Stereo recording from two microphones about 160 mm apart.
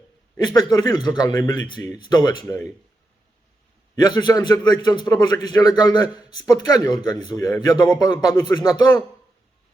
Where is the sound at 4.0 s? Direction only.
25° left (ahead or behind).